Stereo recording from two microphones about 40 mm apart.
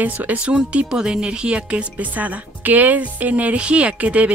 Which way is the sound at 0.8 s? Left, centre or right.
Centre.